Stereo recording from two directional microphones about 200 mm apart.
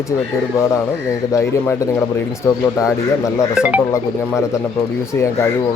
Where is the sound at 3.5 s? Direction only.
5° right (ahead or behind).